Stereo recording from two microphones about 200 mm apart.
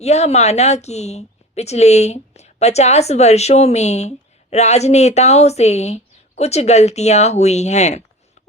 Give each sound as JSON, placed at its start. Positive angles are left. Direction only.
{"t": 0.0, "sound": "a woman's voice", "side_deg": 35}